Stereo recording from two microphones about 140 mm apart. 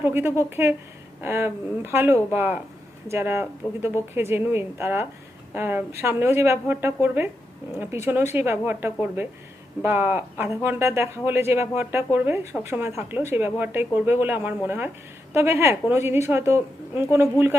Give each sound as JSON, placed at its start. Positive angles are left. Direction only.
{"t": 0.0, "sound": "speech", "side_deg": -15}